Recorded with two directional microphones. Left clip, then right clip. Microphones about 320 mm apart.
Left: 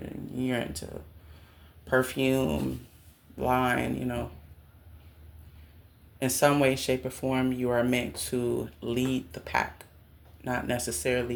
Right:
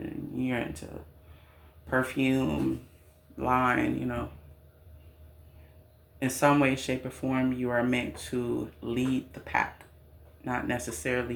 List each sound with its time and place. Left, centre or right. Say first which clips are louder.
0.3 s speech: left 2 dB; left
1.9 s speech: left 2 dB; left
6.1 s speech: even; left